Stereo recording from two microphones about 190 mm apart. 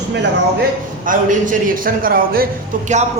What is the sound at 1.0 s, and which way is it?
A man's voice, 45° right (ahead or behind).